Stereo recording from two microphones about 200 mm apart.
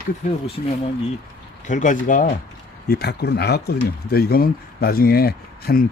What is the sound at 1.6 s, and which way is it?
Speech, 40° left (ahead or behind).